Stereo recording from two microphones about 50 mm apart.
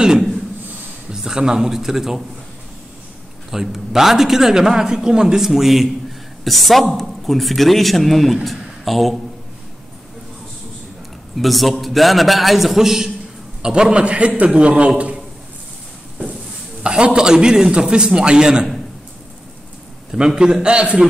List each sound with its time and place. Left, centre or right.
0.0 s a sound: centre
1.1 s a man's voice: centre
3.5 s a man's voice: centre
11.3 s a man's voice: centre; by 14.9 s right
16.8 s a man's voice: centre
20.1 s a man's voice: centre